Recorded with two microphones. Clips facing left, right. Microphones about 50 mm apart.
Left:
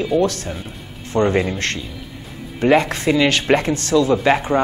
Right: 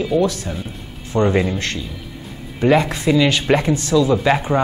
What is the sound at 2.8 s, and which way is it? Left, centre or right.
Speech, left.